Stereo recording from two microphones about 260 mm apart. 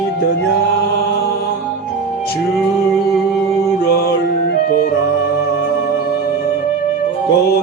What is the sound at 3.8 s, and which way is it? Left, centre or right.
Music, left.